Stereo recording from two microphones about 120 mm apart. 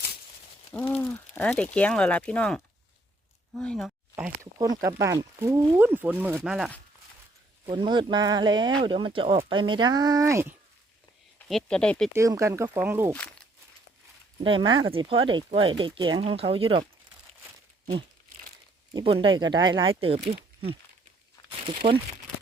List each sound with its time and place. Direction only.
0.7 s speech: 15° left (ahead or behind)
4.5 s speech: 30° right (ahead or behind)
7.7 s speech: 40° right (ahead or behind); by 10.5 s 25° right (ahead or behind)
11.4 s speech: 5° left (ahead or behind)
12.1 s speech: 25° right (ahead or behind)
14.4 s speech: 45° right (ahead or behind)
16.2 s speech: 55° right (ahead or behind)
19.0 s speech: 45° right (ahead or behind)